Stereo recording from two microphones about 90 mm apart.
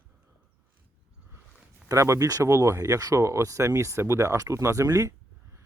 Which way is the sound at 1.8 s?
35° right (ahead or behind).